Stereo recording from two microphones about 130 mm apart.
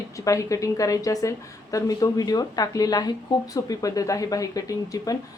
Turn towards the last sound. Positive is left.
turn(degrees=25)  # may be behind; listen again after turning